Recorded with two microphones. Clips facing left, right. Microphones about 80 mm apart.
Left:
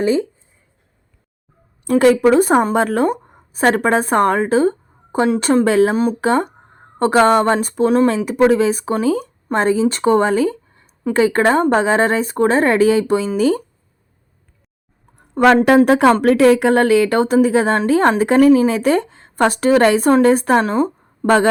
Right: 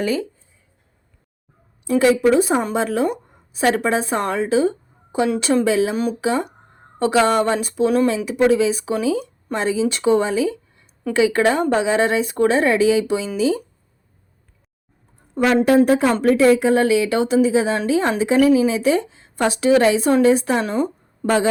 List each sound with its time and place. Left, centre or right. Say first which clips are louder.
0.0 s speech: left 5 dB; left
1.9 s a woman's voice: left 3 dB; left
6.0 s speech: left 4 dB; left
6.2 s a woman's voice: left 4 dB; left
15.6 s a woman's voice: left 4 dB; left